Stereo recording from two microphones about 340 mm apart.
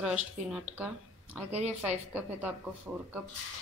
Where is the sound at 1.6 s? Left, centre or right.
Centre.